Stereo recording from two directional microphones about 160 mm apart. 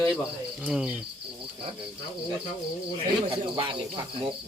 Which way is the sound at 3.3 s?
35° right (ahead or behind).